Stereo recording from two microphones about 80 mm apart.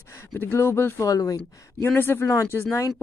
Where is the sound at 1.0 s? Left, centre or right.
Left.